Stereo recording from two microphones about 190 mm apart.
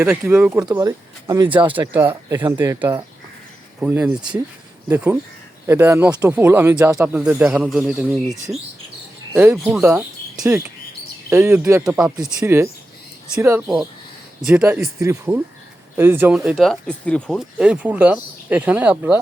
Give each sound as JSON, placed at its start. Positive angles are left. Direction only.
{"t": 0.0, "sound": "speech", "side_deg": -10}